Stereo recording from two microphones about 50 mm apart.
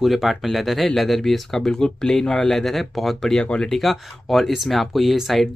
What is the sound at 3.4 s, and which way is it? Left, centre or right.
Speech, left.